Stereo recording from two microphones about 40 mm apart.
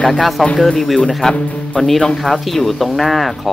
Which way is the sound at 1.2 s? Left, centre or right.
Centre.